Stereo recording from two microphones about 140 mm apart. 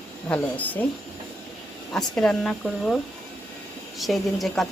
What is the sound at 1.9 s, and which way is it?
Speech, 5° left (ahead or behind).